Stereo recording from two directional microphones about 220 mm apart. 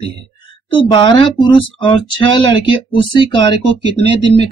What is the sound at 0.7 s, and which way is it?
Speech, 20° left (ahead or behind).